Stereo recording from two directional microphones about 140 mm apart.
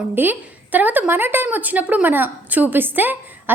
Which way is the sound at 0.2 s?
10° right (ahead or behind).